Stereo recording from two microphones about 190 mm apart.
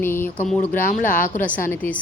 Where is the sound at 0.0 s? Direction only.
10° left (ahead or behind).